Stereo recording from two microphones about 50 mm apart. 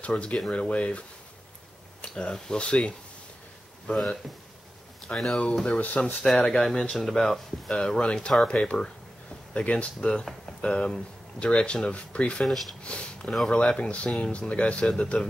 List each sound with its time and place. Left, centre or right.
0.0 s speech: left
3.8 s speech: centre
5.1 s speech: left
6.2 s speech: centre
7.7 s speech: centre
12.4 s speech: centre
12.8 s speech: left